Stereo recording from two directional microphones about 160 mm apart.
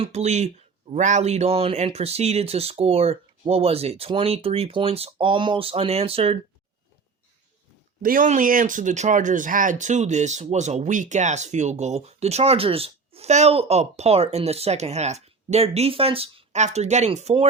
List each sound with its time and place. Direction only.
0.0 s speech: 40° right (ahead or behind)
8.0 s speech: 55° right (ahead or behind); by 17.4 s 40° right (ahead or behind)